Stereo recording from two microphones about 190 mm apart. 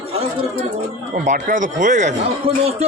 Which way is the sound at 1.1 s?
40° right (ahead or behind).